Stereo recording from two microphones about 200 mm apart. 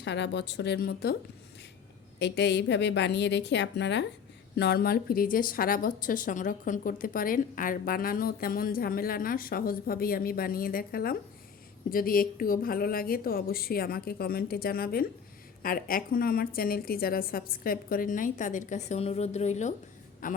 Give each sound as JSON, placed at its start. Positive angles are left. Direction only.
{"t": 0.0, "sound": "a woman's voice", "side_deg": 60}
{"t": 2.1, "sound": "a woman's voice", "side_deg": 60}